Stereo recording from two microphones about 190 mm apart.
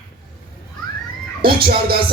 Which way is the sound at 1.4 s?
55° right (ahead or behind).